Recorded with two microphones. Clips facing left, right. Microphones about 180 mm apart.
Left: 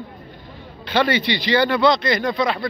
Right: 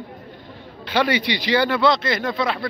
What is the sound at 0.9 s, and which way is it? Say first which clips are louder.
Speech: left 1 dB; 10° right (ahead or behind).